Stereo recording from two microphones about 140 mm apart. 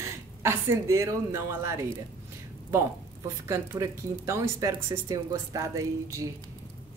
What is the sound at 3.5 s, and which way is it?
A woman's voice, 20° right (ahead or behind).